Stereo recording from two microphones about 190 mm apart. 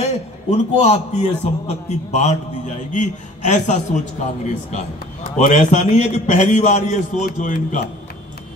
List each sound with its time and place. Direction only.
0.0 s a man's voice: 35° left (ahead or behind)